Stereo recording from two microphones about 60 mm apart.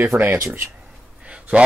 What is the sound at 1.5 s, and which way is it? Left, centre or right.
Speech, right.